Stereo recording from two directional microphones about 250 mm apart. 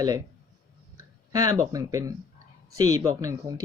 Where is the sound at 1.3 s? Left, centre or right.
Centre.